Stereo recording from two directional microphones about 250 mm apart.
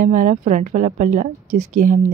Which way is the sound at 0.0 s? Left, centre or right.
Right.